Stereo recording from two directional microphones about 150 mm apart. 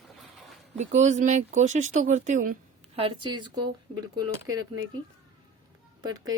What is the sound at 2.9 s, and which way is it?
Speech, 35° right (ahead or behind).